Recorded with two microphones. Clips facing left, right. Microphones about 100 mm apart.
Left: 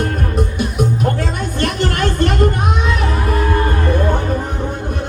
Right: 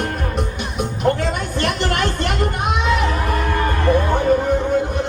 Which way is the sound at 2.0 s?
45° left (ahead or behind).